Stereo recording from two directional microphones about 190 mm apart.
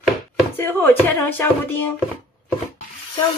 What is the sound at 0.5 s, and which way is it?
Speech, 10° left (ahead or behind).